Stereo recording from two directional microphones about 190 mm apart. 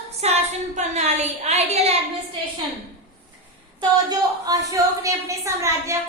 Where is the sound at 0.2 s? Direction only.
35° right (ahead or behind).